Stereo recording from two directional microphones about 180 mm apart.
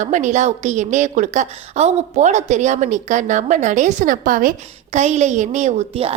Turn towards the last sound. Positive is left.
turn(degrees=-35)  # may be behind; listen again after turning